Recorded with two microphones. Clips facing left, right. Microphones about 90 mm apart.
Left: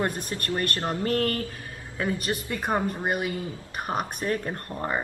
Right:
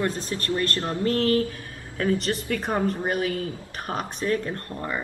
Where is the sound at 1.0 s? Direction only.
35° right (ahead or behind).